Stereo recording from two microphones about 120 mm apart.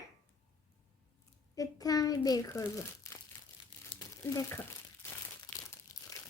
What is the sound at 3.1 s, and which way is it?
Crumpling, 25° left (ahead or behind).